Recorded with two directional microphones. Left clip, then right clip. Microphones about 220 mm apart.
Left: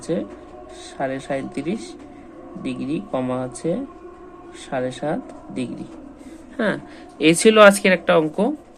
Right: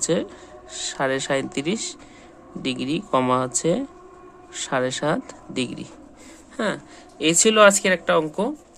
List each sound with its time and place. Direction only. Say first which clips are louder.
0.0 s speech: right 2 dB; 25° right (ahead or behind)
6.6 s speech: left 3 dB; 15° right (ahead or behind)